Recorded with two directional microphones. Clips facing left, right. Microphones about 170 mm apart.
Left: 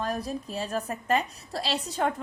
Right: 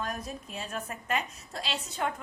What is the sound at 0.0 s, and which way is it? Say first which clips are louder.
A woman's voice: left 6 dB; 30° left (ahead or behind).